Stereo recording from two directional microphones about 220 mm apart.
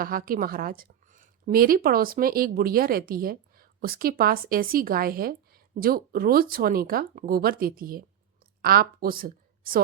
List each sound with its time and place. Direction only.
0.0 s a woman's voice: 40° right (ahead or behind)